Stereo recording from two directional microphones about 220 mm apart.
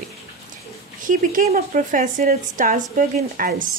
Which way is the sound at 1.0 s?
35° right (ahead or behind).